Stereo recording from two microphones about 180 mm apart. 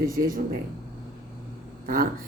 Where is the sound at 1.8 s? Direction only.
55° right (ahead or behind).